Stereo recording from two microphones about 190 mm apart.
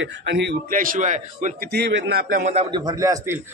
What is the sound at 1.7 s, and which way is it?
Speech, 60° right (ahead or behind).